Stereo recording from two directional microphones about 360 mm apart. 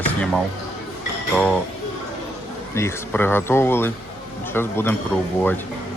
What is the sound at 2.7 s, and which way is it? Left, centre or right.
Speech, centre.